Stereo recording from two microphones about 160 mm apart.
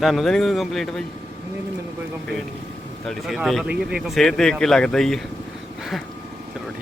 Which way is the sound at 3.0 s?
Centre (ahead or behind).